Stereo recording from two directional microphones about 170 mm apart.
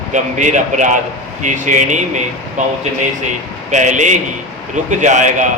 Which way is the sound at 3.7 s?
45° right (ahead or behind).